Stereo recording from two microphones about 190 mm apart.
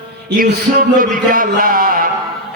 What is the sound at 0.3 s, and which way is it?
A man's voice, 55° right (ahead or behind).